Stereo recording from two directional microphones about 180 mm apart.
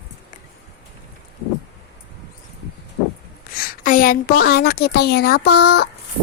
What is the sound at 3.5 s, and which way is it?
A woman's voice, 55° left (ahead or behind).